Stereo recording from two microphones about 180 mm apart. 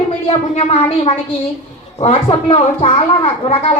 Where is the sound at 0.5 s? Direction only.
35° left (ahead or behind).